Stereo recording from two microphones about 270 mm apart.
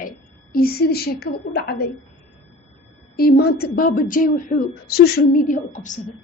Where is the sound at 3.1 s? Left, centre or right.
Left.